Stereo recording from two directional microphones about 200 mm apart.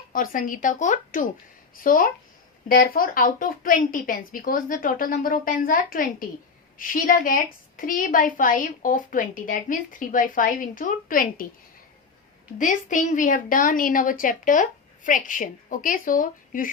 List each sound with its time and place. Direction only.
0.1 s a woman's voice: 45° left (ahead or behind)
12.5 s a woman's voice: 40° left (ahead or behind)